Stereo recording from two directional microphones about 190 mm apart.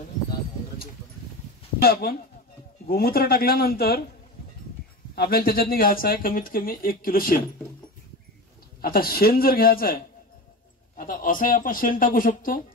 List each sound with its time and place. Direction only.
1.8 s speech: 55° left (ahead or behind)
5.1 s speech: 55° left (ahead or behind)
8.8 s speech: 50° left (ahead or behind)